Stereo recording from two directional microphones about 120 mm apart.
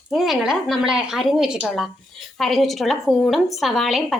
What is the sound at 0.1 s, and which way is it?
A woman's voice, centre (ahead or behind).